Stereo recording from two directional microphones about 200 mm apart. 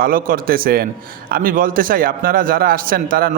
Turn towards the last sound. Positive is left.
turn(degrees=-45)  # may be behind; listen again after turning